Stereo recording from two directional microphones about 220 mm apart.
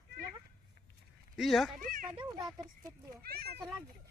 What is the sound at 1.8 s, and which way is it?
Speech, 40° right (ahead or behind).